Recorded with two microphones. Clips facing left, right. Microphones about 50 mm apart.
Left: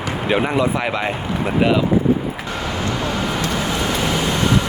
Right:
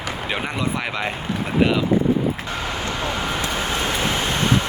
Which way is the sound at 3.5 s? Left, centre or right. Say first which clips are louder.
Left 2 dB; right.